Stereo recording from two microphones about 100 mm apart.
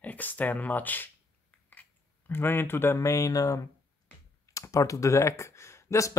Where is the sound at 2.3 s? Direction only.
20° left (ahead or behind).